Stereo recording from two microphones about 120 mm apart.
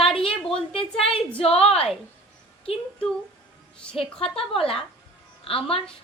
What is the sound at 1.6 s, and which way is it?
Speech, 55° left (ahead or behind).